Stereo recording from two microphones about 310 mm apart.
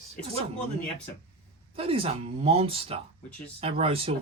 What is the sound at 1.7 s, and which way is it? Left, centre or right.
Speech, centre.